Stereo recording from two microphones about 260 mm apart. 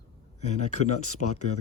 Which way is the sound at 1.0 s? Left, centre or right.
Left.